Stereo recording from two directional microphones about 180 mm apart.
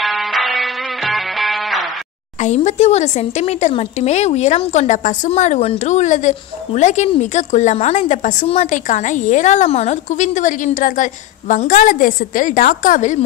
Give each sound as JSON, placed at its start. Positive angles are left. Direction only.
{"t": 0.0, "sound": "music", "side_deg": 0}
{"t": 2.4, "sound": "speech", "side_deg": 40}